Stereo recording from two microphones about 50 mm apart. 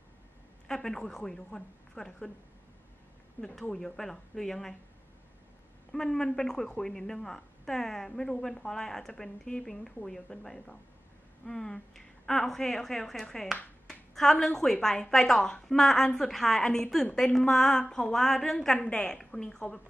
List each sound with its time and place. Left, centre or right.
0.7 s a woman's voice: centre
3.7 s a woman's voice: centre
5.9 s a woman's voice: centre
18.8 s a woman's voice: left